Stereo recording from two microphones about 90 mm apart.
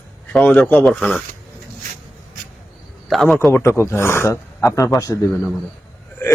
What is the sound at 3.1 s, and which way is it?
Speech, 5° left (ahead or behind).